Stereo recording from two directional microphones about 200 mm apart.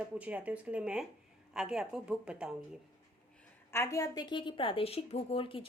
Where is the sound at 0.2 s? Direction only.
5° right (ahead or behind).